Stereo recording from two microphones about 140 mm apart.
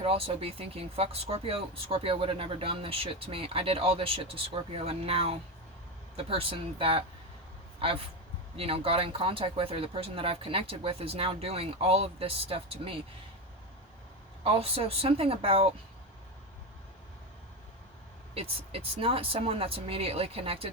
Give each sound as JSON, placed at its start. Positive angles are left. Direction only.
{"t": 0.0, "sound": "speech", "side_deg": -40}
{"t": 8.5, "sound": "speech", "side_deg": -45}
{"t": 14.4, "sound": "speech", "side_deg": -45}
{"t": 18.3, "sound": "speech", "side_deg": -45}